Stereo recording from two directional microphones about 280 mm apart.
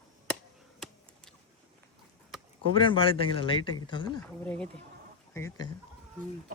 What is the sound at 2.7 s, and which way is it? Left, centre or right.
Speech, centre.